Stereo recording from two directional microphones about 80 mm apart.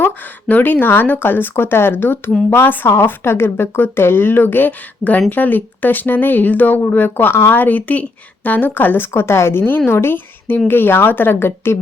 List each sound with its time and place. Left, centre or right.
0.4 s speech: left